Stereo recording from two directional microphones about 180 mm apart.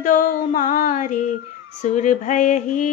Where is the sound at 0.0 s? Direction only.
50° left (ahead or behind).